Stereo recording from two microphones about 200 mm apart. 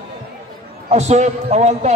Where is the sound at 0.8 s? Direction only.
35° right (ahead or behind).